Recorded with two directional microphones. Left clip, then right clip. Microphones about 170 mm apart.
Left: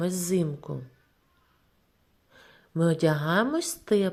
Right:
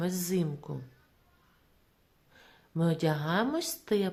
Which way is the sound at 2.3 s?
20° left (ahead or behind).